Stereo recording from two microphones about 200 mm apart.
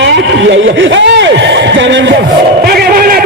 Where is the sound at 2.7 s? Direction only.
50° right (ahead or behind).